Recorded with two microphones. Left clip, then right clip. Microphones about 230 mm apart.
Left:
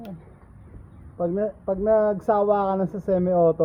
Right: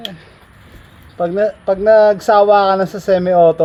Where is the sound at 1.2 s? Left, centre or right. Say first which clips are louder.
Right 10 dB; right.